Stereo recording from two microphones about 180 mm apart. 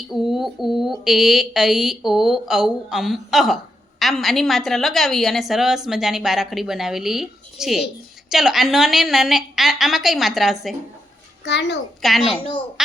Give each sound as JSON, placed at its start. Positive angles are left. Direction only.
{"t": 0.0, "sound": "a woman's voice", "side_deg": 0}
{"t": 11.4, "sound": "a child's voice", "side_deg": 70}
{"t": 12.0, "sound": "a woman's voice", "side_deg": 0}